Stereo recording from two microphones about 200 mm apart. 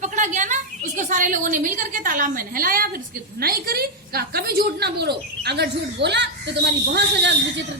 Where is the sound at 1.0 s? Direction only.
40° right (ahead or behind).